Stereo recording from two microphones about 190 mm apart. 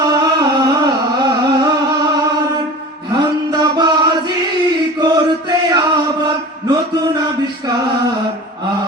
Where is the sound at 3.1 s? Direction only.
20° right (ahead or behind).